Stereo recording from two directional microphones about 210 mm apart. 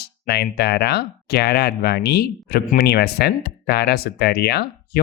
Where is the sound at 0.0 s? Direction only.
50° left (ahead or behind).